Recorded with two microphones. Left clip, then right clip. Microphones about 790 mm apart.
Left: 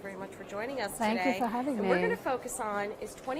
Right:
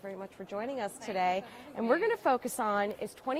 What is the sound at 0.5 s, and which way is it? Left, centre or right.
A woman's voice, right.